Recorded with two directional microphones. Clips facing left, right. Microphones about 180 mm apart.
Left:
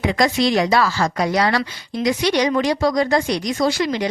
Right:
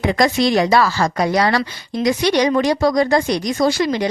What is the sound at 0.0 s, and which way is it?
A woman's voice, 50° right (ahead or behind).